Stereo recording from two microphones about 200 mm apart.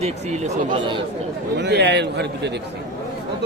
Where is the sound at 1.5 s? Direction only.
55° right (ahead or behind).